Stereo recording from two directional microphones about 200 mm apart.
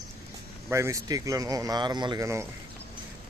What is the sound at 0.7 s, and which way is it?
Speech, 15° right (ahead or behind).